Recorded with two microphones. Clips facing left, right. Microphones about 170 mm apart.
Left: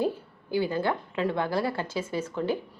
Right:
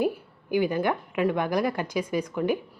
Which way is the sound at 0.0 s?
15° right (ahead or behind).